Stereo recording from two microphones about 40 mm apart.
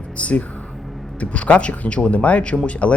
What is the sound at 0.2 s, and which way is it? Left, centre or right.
Speech, left.